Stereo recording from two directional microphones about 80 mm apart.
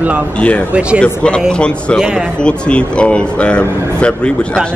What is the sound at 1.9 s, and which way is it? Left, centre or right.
Speech, centre.